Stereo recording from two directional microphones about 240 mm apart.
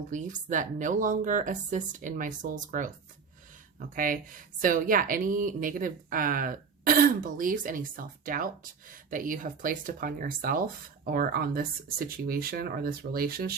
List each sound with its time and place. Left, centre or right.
0.1 s speech: right